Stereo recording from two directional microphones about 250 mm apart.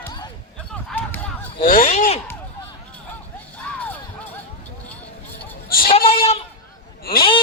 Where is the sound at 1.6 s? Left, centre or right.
Left.